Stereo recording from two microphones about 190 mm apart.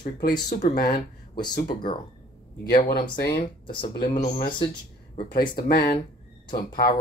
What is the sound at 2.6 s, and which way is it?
Speech, 55° left (ahead or behind).